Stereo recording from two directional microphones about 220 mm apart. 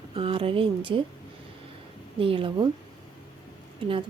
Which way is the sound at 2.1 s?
25° right (ahead or behind).